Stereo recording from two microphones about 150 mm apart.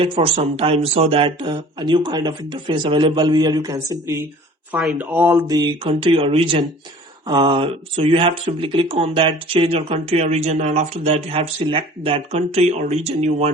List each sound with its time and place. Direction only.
0.0 s speech: 40° right (ahead or behind); by 3.9 s 20° right (ahead or behind)
4.9 s speech: 15° right (ahead or behind)
5.5 s speech: 30° right (ahead or behind); by 11.1 s 50° right (ahead or behind)
11.1 s speech: 40° right (ahead or behind)